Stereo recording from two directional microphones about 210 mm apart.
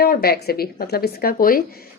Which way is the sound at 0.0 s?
45° left (ahead or behind).